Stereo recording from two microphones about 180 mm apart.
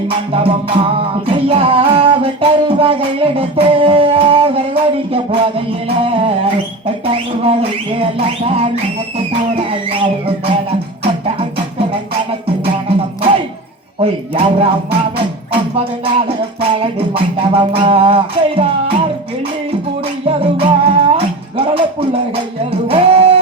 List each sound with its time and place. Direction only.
0.3 s music: 30° right (ahead or behind)
9.6 s music: 30° right (ahead or behind)
13.0 s music: 30° right (ahead or behind)
15.7 s music: 30° right (ahead or behind)
20.2 s music: 30° right (ahead or behind)
22.9 s music: 30° right (ahead or behind)